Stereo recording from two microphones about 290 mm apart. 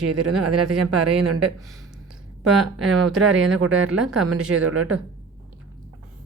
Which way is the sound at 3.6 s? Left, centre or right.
Right.